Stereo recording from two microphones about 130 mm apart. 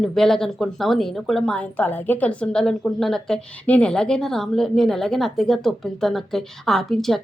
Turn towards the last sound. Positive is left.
turn(degrees=0)  # may be behind; listen again after turning